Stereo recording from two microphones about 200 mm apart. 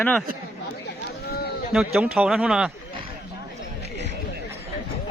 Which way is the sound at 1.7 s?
5° right (ahead or behind).